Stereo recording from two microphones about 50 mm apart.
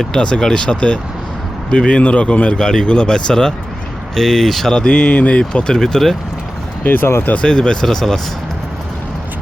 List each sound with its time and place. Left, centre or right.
0.0 s speech: centre
4.7 s speech: left
6.8 s speech: left
7.4 s speech: centre